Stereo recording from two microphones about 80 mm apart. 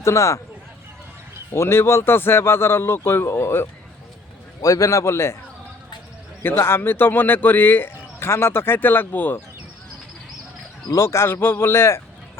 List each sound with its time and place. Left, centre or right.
0.0 s a man's voice: left
1.5 s a man's voice: left
4.6 s a man's voice: left
6.4 s speech: left
10.9 s a man's voice: left